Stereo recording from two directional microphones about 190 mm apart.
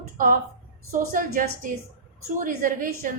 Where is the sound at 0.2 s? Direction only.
45° right (ahead or behind).